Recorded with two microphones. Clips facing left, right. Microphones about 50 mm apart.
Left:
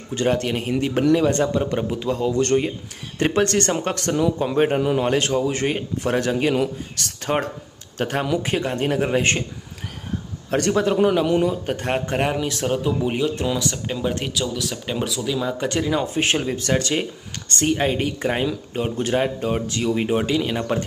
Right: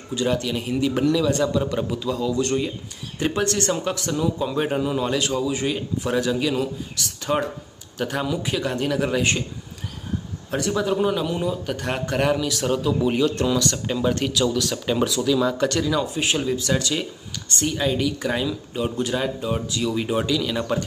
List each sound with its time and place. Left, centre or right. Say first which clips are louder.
0.1 s speech: left 2 dB; left
10.5 s speech: left 3 dB; left
11.6 s speech: left 3 dB; left; by 15.8 s centre
15.8 s speech: left 1 dB; left